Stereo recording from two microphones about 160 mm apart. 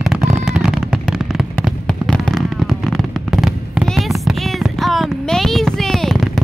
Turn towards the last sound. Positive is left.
turn(degrees=0)  # may be behind; listen again after turning